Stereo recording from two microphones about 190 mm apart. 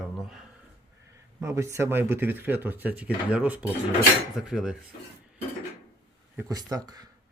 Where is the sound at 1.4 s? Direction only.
15° right (ahead or behind).